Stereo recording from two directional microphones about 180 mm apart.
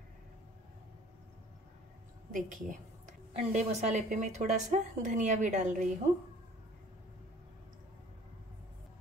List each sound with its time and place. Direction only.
2.3 s a woman's voice: 45° right (ahead or behind)